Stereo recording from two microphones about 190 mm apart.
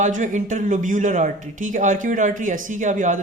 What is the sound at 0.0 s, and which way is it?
Speech, 40° right (ahead or behind).